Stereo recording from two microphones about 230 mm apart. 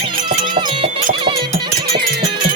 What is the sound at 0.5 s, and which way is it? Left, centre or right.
Music, right.